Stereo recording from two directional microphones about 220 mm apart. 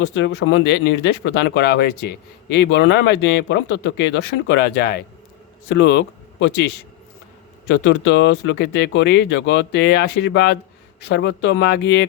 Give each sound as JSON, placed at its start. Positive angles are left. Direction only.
{"t": 0.0, "sound": "speech", "side_deg": 50}
{"t": 7.7, "sound": "speech", "side_deg": 55}